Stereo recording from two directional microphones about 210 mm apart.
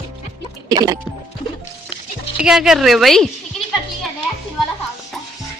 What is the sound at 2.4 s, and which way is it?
Speech, 5° right (ahead or behind).